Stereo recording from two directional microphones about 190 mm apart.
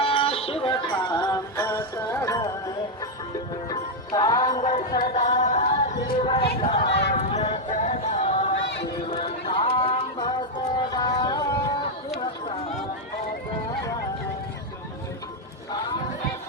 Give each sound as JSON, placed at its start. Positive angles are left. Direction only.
{"t": 0.0, "sound": "music", "side_deg": 30}
{"t": 3.5, "sound": "music", "side_deg": 20}
{"t": 4.6, "sound": "music", "side_deg": 35}
{"t": 6.6, "sound": "speech", "side_deg": 30}
{"t": 6.8, "sound": "a sound", "side_deg": 65}
{"t": 7.1, "sound": "music", "side_deg": 35}
{"t": 10.9, "sound": "a sound", "side_deg": 20}